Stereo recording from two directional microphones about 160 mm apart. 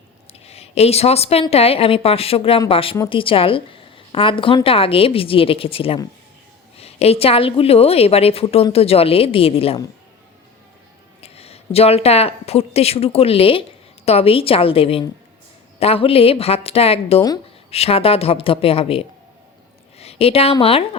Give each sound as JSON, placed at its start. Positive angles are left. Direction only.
{"t": 0.3, "sound": "a woman's voice", "side_deg": 40}
{"t": 11.2, "sound": "a woman's voice", "side_deg": 40}